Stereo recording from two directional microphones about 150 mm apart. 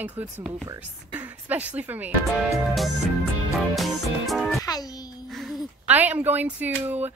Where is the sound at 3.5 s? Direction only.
Centre (ahead or behind).